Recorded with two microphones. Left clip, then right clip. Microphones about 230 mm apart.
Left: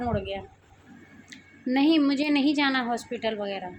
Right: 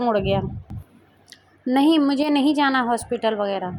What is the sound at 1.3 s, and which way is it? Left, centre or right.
A woman's voice, centre.